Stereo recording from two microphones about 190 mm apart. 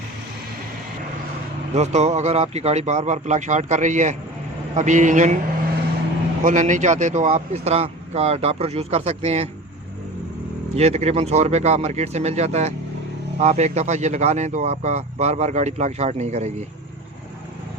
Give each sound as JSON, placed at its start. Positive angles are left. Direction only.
{"t": 1.7, "sound": "speech", "side_deg": -35}
{"t": 6.4, "sound": "speech", "side_deg": -40}
{"t": 10.8, "sound": "speech", "side_deg": -35}